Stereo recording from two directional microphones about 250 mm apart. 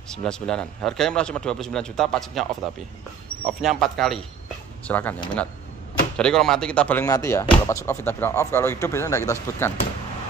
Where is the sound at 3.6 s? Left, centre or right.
Centre.